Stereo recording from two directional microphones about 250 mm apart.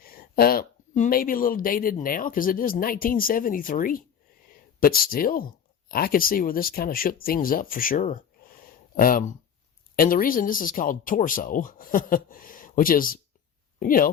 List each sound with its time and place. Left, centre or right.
0.0 s speech: left